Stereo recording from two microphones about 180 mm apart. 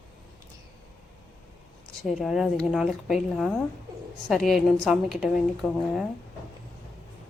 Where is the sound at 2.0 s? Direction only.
Centre (ahead or behind).